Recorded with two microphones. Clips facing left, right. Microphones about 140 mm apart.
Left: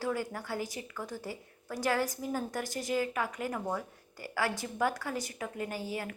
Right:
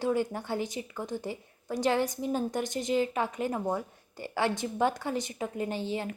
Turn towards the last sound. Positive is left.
turn(degrees=-25)  # may be behind; listen again after turning